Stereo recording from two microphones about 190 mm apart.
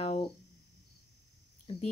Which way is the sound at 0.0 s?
30° left (ahead or behind).